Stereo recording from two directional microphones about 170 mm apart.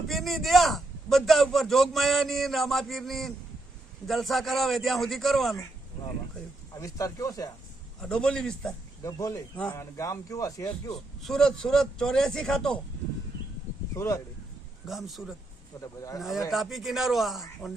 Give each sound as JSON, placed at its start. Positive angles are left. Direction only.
{"t": 0.1, "sound": "a man's voice", "side_deg": 0}
{"t": 6.7, "sound": "speech", "side_deg": 20}
{"t": 8.0, "sound": "a man's voice", "side_deg": 5}
{"t": 9.0, "sound": "speech", "side_deg": 20}
{"t": 9.6, "sound": "speech", "side_deg": 10}
{"t": 10.0, "sound": "speech", "side_deg": 20}
{"t": 11.2, "sound": "a man's voice", "side_deg": 0}
{"t": 13.9, "sound": "speech", "side_deg": 15}
{"t": 14.8, "sound": "a man's voice", "side_deg": 0}
{"t": 15.8, "sound": "speech", "side_deg": 20}
{"t": 16.5, "sound": "a man's voice", "side_deg": 0}